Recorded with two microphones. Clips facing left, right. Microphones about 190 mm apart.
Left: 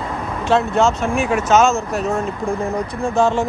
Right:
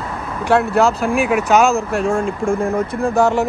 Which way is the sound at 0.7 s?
35° right (ahead or behind).